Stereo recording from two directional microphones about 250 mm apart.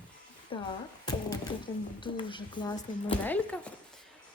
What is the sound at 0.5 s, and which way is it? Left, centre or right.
Speech, centre.